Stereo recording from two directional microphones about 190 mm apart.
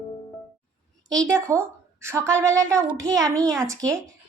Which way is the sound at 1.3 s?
15° right (ahead or behind).